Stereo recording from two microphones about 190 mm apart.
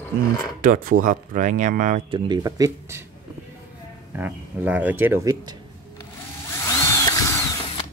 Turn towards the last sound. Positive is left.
turn(degrees=20)  # may be behind; listen again after turning